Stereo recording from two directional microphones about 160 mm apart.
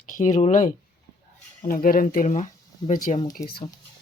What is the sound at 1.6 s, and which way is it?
Speech, 60° left (ahead or behind).